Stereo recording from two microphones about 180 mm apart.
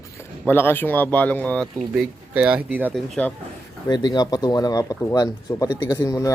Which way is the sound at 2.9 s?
Centre (ahead or behind).